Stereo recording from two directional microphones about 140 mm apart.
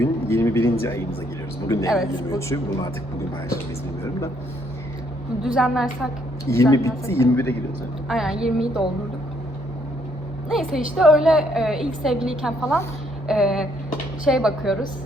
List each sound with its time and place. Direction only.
0.0 s a sound: 20° left (ahead or behind)
1.6 s a woman's voice: 20° left (ahead or behind)
5.4 s a woman's voice: 5° right (ahead or behind)
6.5 s a woman's voice: 20° left (ahead or behind)
8.0 s a woman's voice: 5° right (ahead or behind)
10.5 s a woman's voice: centre (ahead or behind)